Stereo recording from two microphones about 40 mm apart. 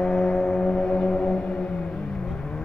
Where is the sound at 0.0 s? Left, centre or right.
Left.